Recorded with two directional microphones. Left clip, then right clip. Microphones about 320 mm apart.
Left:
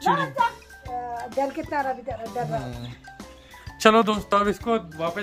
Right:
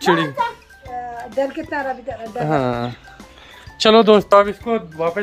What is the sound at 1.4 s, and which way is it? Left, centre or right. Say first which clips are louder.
Speech: right 4 dB; left.